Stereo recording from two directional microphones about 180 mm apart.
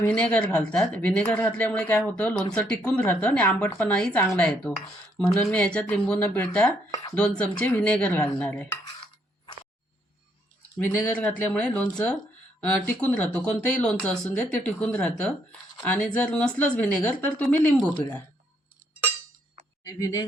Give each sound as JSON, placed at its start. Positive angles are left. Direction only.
{"t": 0.0, "sound": "speech", "side_deg": 10}
{"t": 10.8, "sound": "speech", "side_deg": 10}
{"t": 19.8, "sound": "speech", "side_deg": 15}